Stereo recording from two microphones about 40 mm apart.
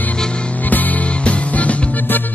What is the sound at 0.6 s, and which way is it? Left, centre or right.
Music, left.